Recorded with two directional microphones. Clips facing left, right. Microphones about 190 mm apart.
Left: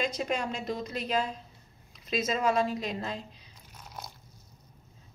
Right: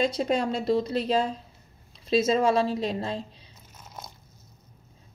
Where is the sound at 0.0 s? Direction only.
35° right (ahead or behind).